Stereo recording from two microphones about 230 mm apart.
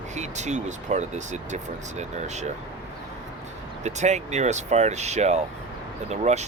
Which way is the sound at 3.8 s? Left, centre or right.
Right.